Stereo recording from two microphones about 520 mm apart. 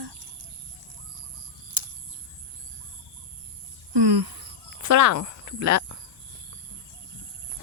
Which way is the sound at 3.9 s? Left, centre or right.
Right.